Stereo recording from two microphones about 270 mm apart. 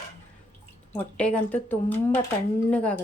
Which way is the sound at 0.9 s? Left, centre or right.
Centre.